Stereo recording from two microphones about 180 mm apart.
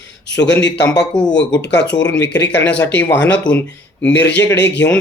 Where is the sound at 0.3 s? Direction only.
75° left (ahead or behind).